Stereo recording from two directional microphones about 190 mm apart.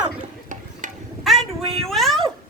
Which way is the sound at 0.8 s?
40° right (ahead or behind).